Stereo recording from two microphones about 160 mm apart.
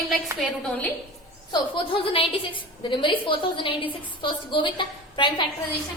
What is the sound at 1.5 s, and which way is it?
A woman's voice, 35° left (ahead or behind).